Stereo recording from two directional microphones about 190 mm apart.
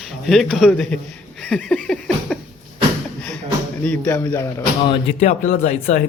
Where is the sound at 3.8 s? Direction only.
5° left (ahead or behind).